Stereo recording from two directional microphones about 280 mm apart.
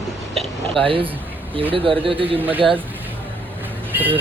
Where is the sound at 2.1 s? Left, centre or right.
Centre.